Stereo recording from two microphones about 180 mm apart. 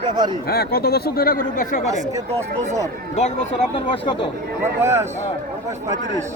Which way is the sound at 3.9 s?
30° left (ahead or behind).